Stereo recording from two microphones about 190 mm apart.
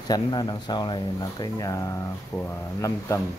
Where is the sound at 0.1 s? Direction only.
20° left (ahead or behind).